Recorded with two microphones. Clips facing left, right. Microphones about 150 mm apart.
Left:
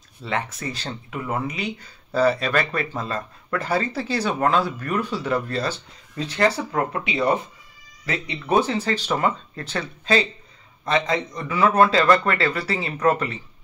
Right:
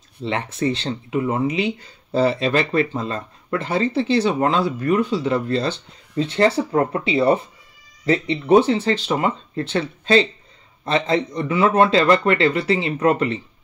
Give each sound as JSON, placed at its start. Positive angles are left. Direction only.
{"t": 0.2, "sound": "speech", "side_deg": -30}